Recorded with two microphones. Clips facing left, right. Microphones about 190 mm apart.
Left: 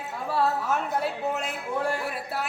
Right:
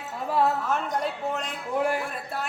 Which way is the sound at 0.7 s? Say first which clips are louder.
Even; 5° left (ahead or behind).